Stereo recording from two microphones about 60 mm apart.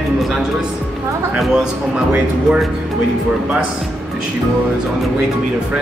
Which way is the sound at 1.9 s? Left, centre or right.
Centre.